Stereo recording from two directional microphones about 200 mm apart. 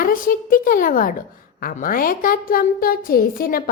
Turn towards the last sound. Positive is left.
turn(degrees=45)  # may be behind; listen again after turning